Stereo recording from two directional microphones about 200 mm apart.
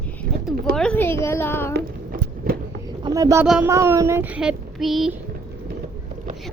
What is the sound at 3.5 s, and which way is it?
Child singing, 10° right (ahead or behind).